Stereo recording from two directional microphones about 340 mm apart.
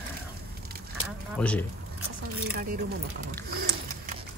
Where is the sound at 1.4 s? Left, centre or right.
Centre.